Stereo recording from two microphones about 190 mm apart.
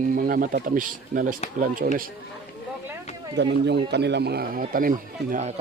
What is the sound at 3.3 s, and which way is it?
Speech, 65° right (ahead or behind).